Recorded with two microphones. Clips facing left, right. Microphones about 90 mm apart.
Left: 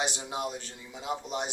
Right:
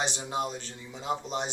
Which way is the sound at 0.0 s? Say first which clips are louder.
Right 1 dB; 10° left (ahead or behind).